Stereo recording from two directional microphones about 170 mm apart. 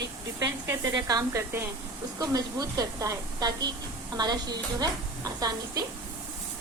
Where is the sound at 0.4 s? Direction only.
15° right (ahead or behind).